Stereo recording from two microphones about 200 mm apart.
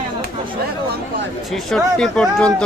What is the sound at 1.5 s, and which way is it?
Speech, centre (ahead or behind).